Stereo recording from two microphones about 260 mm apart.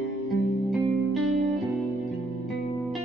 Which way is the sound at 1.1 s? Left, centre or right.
Right.